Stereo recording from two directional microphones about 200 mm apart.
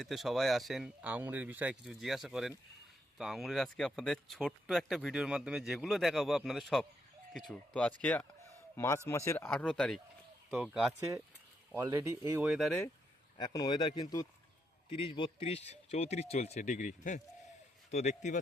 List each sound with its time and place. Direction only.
0.0 s a man's voice: centre (ahead or behind)
11.7 s speech: 15° right (ahead or behind); by 12.8 s centre (ahead or behind)
13.3 s speech: 20° left (ahead or behind); by 18.3 s 35° left (ahead or behind)